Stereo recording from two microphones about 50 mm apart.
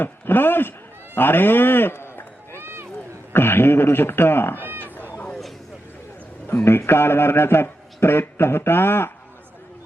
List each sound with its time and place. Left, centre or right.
0.0 s a man's voice: left
1.1 s run: left
2.6 s a sound: right
3.3 s a man's voice: left
4.6 s cat: right
6.5 s a man's voice: left